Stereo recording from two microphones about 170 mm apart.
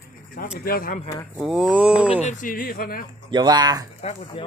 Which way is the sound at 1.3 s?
5° right (ahead or behind).